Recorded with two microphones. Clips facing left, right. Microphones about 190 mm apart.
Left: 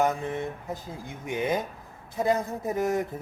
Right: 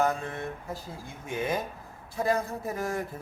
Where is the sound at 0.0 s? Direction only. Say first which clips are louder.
Left 2 dB; 20° left (ahead or behind).